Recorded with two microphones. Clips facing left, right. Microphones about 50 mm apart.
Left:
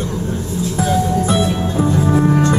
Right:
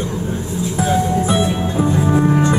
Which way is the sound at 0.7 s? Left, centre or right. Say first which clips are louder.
Even; centre.